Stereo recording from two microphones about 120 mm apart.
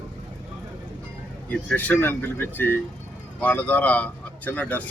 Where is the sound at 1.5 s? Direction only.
15° left (ahead or behind).